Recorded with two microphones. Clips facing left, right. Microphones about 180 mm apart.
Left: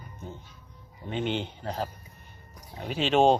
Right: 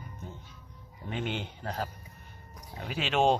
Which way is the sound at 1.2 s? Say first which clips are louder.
Left 5 dB; 30° left (ahead or behind).